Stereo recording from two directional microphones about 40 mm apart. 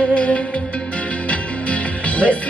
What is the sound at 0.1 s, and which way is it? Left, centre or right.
Music, left.